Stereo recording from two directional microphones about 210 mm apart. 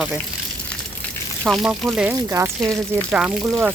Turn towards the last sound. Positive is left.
turn(degrees=-5)  # may be behind; listen again after turning